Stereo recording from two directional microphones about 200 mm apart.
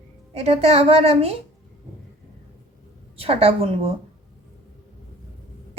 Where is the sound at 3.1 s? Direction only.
30° right (ahead or behind).